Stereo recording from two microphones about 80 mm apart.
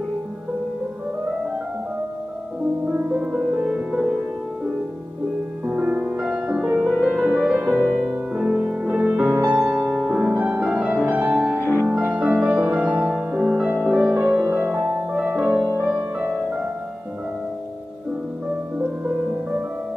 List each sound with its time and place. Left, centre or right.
2.9 s music: centre
5.7 s music: centre
7.6 s music: right
8.1 s music: centre
9.3 s music: right
9.8 s music: centre
11.5 s music: left
12.0 s music: right
14.2 s music: right
14.7 s music: centre
18.8 s music: centre